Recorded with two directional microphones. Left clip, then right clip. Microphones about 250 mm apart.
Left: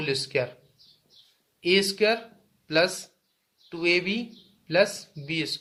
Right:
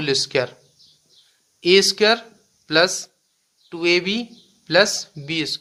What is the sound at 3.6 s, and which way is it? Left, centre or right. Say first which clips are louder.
Speech: right 5 dB; right.